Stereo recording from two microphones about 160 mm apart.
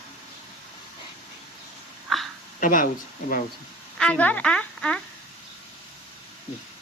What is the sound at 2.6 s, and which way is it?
Speech, 55° left (ahead or behind).